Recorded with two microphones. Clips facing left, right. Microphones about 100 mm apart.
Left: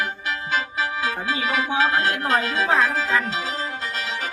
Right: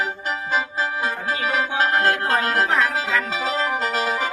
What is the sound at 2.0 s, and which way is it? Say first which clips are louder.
Music: right 2 dB; 60° right (ahead or behind).